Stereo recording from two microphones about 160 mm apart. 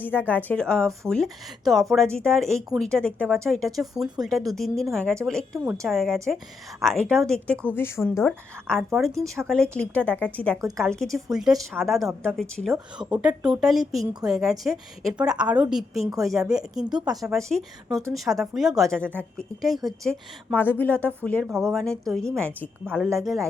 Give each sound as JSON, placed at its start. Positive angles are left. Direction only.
{"t": 0.0, "sound": "a woman's voice", "side_deg": 10}
{"t": 5.5, "sound": "speech", "side_deg": -15}
{"t": 5.8, "sound": "a woman's voice", "side_deg": 0}
{"t": 14.0, "sound": "a woman's voice", "side_deg": -25}
{"t": 14.3, "sound": "a woman's voice", "side_deg": -5}